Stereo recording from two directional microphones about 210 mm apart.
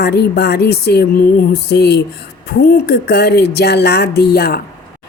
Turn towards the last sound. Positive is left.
turn(degrees=50)  # may be behind; listen again after turning